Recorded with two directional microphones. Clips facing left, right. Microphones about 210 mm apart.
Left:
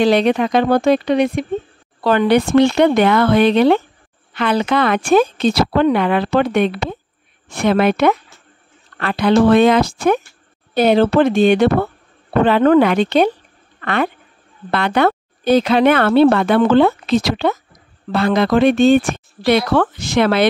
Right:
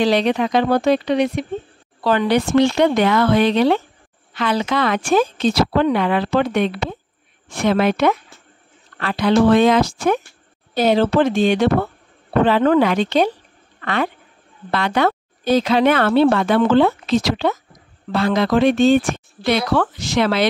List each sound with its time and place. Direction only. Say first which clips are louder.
0.0 s speech: left 3 dB; 55° left (ahead or behind)